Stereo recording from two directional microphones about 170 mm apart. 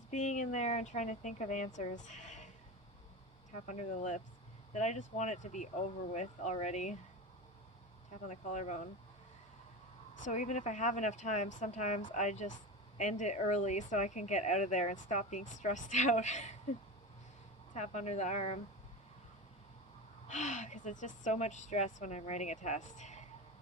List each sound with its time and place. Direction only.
0.1 s a woman's voice: 45° left (ahead or behind)
3.7 s a woman's voice: 45° left (ahead or behind)
8.3 s a woman's voice: 45° left (ahead or behind)
10.2 s a woman's voice: 45° left (ahead or behind)
17.7 s a woman's voice: 40° left (ahead or behind)
20.2 s a woman's voice: 45° left (ahead or behind)